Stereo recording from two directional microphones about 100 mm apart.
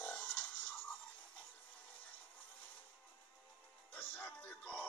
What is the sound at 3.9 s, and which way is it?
Music, 10° left (ahead or behind).